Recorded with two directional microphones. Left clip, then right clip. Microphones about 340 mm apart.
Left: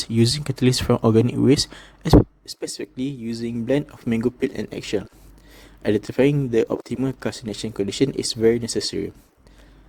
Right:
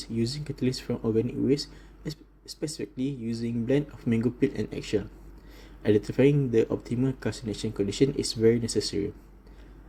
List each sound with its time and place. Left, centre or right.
0.0 s speech: left